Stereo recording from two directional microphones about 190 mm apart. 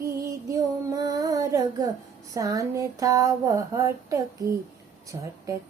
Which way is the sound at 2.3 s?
15° right (ahead or behind).